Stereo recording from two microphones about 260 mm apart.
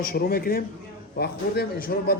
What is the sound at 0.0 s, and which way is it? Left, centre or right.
A man's voice, left.